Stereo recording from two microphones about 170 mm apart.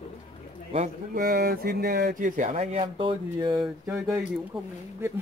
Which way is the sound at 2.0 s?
50° right (ahead or behind).